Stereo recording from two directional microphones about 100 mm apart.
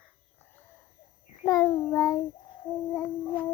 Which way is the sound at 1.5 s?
35° left (ahead or behind).